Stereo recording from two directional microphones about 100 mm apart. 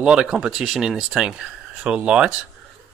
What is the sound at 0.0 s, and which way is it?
Speech, 10° right (ahead or behind).